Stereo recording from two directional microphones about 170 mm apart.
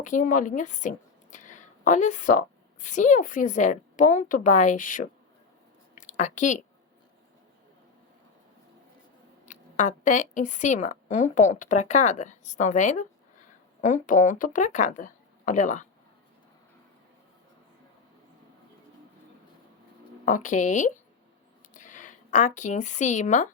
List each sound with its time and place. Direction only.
0.0 s a woman's voice: 50° left (ahead or behind)
6.0 s a sound: 45° left (ahead or behind)
9.5 s a woman's voice: 45° left (ahead or behind)
20.2 s a woman's voice: 50° left (ahead or behind)